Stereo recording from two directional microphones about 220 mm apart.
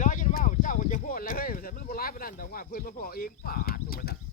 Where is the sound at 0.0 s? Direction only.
35° left (ahead or behind).